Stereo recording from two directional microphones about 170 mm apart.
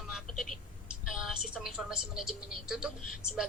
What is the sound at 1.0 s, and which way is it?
A woman's voice, centre (ahead or behind).